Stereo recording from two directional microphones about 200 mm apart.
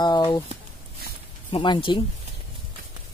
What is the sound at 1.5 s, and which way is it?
Speech, 25° left (ahead or behind).